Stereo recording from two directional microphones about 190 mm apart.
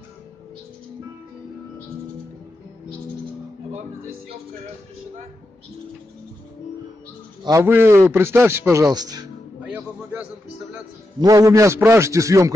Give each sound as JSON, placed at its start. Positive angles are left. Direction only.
{"t": 7.4, "sound": "a man's voice", "side_deg": -15}
{"t": 9.6, "sound": "music", "side_deg": -10}
{"t": 11.1, "sound": "a man's voice", "side_deg": -20}